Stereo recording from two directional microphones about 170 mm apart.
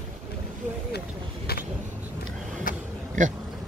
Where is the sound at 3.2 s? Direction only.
45° right (ahead or behind).